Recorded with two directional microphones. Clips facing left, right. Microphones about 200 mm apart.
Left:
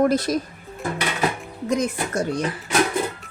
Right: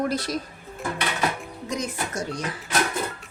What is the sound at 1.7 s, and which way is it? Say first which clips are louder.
Speech: left 7 dB; 60° left (ahead or behind).